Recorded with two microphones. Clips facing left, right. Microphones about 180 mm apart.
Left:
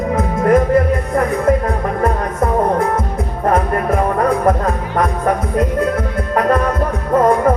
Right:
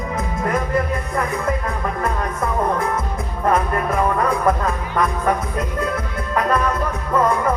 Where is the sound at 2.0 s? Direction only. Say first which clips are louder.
Left 7 dB; 40° left (ahead or behind).